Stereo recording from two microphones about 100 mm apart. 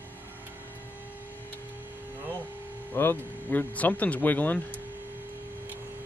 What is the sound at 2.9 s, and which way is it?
Speech, 20° left (ahead or behind).